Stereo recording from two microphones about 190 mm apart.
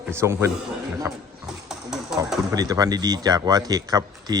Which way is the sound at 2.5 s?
20° right (ahead or behind).